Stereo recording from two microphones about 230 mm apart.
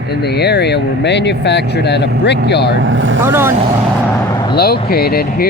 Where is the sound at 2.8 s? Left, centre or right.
Right.